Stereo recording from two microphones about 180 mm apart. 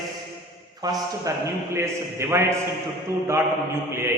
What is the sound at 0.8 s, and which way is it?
A man's voice, 20° right (ahead or behind).